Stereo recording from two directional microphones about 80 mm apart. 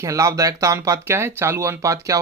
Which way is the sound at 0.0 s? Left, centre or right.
Right.